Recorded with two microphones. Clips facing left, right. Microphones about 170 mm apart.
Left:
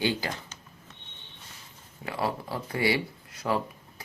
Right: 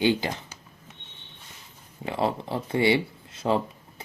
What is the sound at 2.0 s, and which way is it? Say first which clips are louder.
Speech: right 4 dB; 25° right (ahead or behind).